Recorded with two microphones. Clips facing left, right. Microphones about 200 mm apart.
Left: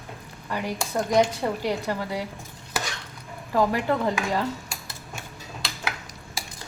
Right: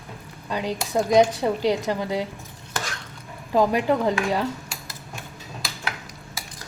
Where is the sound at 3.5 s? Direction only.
15° right (ahead or behind).